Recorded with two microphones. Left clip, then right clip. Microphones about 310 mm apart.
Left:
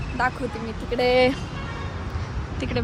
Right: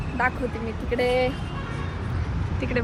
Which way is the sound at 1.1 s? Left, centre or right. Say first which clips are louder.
Left 6 dB; left.